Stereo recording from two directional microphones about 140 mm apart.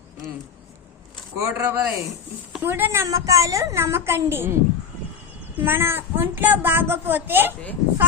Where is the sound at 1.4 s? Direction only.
15° right (ahead or behind).